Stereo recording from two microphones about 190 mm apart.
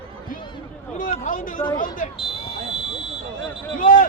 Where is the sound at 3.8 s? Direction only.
45° left (ahead or behind).